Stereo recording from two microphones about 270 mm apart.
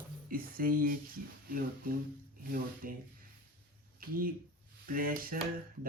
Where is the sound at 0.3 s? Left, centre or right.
Right.